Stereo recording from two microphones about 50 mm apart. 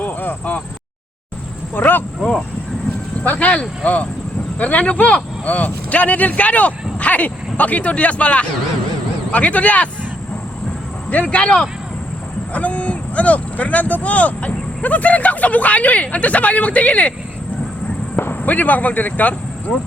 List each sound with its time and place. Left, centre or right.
0.0 s a sound: left
1.7 s speech: left
3.2 s speech: left
11.1 s speech: left
18.2 s speech: left